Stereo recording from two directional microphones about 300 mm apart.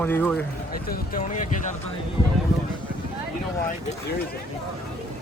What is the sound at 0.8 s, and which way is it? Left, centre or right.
Speech, left.